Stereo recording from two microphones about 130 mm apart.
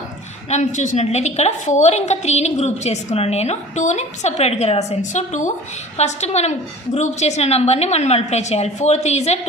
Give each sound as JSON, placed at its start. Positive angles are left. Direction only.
{"t": 0.5, "sound": "a woman's voice", "side_deg": 65}
{"t": 6.0, "sound": "a woman's voice", "side_deg": 60}